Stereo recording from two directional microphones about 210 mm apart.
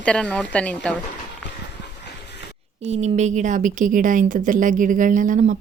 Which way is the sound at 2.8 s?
30° right (ahead or behind).